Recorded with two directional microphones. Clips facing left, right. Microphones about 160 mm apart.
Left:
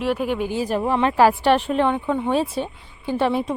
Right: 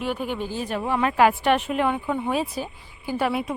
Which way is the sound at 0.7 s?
35° left (ahead or behind).